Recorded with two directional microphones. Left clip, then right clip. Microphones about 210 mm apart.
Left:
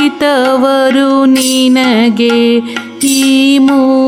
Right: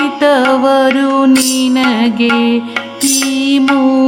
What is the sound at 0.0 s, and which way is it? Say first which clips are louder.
Music: even; 40° left (ahead or behind).